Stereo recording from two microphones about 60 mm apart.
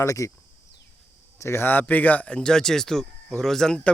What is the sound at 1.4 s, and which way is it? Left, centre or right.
Speech, left.